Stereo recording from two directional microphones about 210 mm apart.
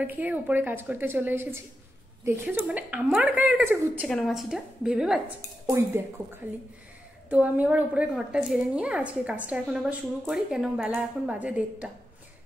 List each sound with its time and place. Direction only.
0.0 s a woman's voice: 10° right (ahead or behind)
5.7 s a woman's voice: 15° right (ahead or behind)
7.2 s a woman's voice: 5° right (ahead or behind)